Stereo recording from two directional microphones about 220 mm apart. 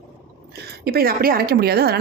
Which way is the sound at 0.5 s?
45° right (ahead or behind).